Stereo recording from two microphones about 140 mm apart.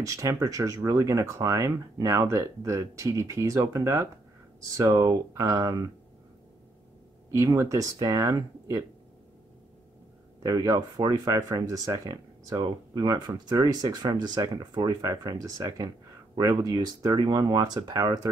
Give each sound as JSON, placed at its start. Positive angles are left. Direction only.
{"t": 0.0, "sound": "speech", "side_deg": -25}
{"t": 7.2, "sound": "speech", "side_deg": -20}
{"t": 10.4, "sound": "speech", "side_deg": -25}